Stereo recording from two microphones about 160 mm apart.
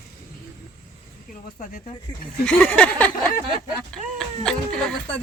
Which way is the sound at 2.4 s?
10° left (ahead or behind).